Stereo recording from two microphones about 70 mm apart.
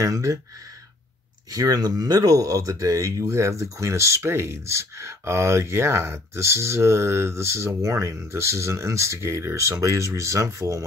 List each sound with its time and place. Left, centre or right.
0.0 s speech: right
1.5 s speech: right